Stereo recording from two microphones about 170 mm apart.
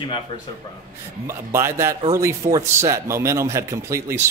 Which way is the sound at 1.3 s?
15° right (ahead or behind).